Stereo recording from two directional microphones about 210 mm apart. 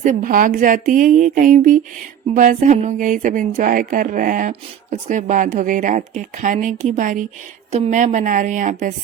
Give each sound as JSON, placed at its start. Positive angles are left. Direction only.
{"t": 0.0, "sound": "speech", "side_deg": -35}